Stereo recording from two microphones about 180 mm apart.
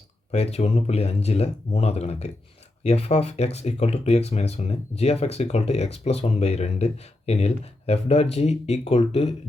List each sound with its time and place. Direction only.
0.3 s speech: 35° left (ahead or behind)